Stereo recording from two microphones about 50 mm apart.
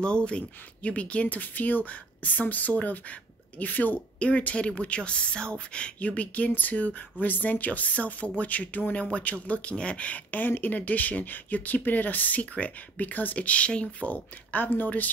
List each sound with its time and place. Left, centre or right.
0.0 s speech: centre; by 15.0 s left